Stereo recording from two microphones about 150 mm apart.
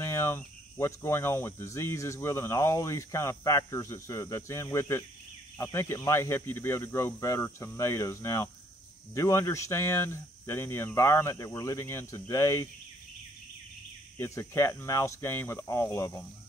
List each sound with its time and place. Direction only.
0.0 s speech: 15° left (ahead or behind)
14.1 s speech: 20° left (ahead or behind)